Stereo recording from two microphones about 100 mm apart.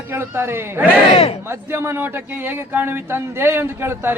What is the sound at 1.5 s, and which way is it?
A man's voice, 25° right (ahead or behind).